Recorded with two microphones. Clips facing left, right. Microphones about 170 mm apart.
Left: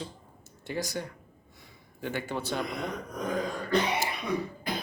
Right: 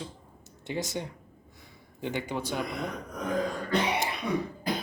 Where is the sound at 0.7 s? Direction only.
20° right (ahead or behind).